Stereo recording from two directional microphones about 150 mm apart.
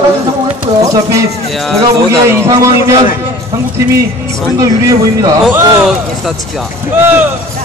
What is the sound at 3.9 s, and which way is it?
A man's voice, 20° right (ahead or behind).